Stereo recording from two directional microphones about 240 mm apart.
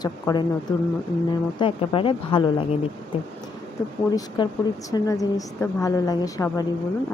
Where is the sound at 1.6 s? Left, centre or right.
Left.